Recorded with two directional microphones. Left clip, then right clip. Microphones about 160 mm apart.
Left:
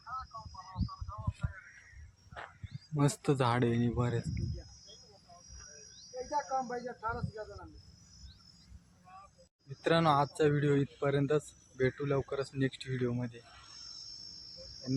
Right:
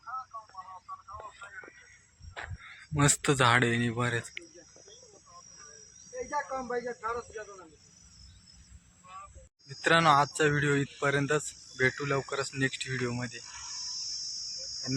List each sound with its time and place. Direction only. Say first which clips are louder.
2.9 s speech: right 5 dB; 5° left (ahead or behind)
6.3 s speech: right 1 dB; 55° left (ahead or behind)
9.6 s speech: right 5 dB; 5° left (ahead or behind)
13.6 s cricket: right 12 dB; 90° left